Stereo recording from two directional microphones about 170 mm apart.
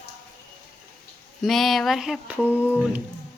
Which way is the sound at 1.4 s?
Centre (ahead or behind).